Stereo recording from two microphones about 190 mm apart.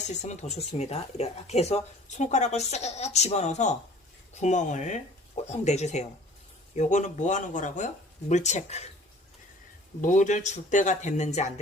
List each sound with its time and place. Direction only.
0.0 s speech: 35° left (ahead or behind)
10.0 s speech: 40° left (ahead or behind)